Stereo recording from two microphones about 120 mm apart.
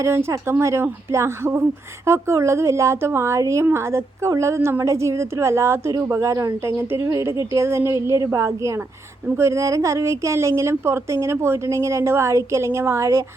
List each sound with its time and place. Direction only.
0.0 s a woman's voice: 25° right (ahead or behind)